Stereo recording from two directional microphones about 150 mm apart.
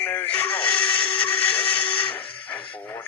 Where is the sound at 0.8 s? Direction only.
35° left (ahead or behind).